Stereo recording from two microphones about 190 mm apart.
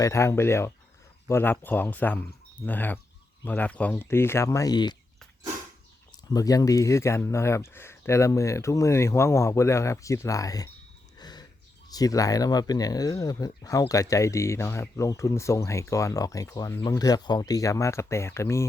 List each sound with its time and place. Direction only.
0.0 s speech: 15° left (ahead or behind)
6.1 s speech: 20° left (ahead or behind)
11.2 s a sound: 20° left (ahead or behind)
11.9 s speech: 20° left (ahead or behind)